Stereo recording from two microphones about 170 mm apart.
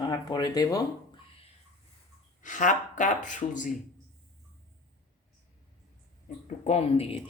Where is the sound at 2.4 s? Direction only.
50° left (ahead or behind).